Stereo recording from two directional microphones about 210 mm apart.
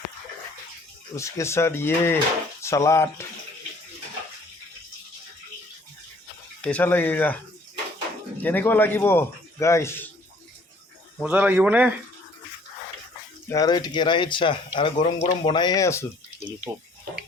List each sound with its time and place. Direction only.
1.1 s a man's voice: 15° left (ahead or behind)
6.6 s a man's voice: 5° left (ahead or behind)
8.4 s a man's voice: 10° left (ahead or behind)
11.2 s speech: 5° right (ahead or behind)
13.5 s speech: 20° left (ahead or behind)